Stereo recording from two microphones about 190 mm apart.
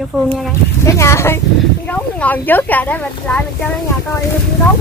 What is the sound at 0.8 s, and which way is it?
Speech, 15° left (ahead or behind).